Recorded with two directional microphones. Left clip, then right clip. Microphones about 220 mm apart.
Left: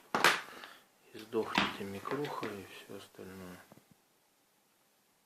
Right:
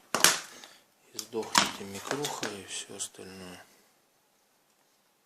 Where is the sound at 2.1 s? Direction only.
45° right (ahead or behind).